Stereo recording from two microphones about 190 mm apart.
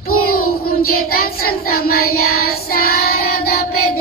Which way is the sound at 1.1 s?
50° left (ahead or behind).